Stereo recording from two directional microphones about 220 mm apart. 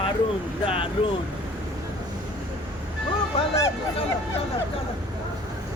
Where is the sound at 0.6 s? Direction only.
25° left (ahead or behind).